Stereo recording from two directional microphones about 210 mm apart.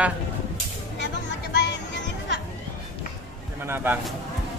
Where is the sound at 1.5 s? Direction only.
55° left (ahead or behind).